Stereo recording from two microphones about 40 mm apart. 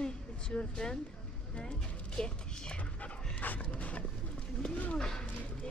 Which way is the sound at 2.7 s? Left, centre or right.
Left.